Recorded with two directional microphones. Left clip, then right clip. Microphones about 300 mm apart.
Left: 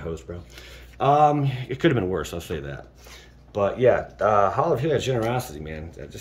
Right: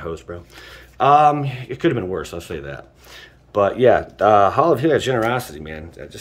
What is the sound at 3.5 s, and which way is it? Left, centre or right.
Speech, centre.